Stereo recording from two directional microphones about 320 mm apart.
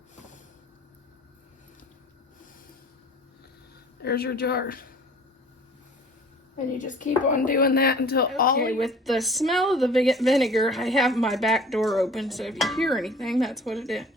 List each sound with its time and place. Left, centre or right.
4.0 s a woman's voice: left
6.7 s a woman's voice: left
8.8 s a woman's voice: centre